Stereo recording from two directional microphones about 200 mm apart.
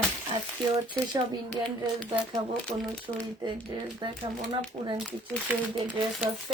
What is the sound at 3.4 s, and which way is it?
Speech, 25° right (ahead or behind).